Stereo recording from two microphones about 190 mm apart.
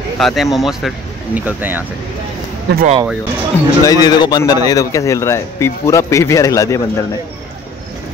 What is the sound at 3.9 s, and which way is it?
A man's voice, 20° left (ahead or behind).